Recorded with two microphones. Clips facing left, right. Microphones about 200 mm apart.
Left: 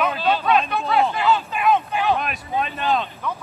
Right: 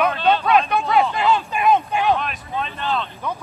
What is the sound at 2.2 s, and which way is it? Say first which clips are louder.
Speech: left 2 dB; 10° left (ahead or behind).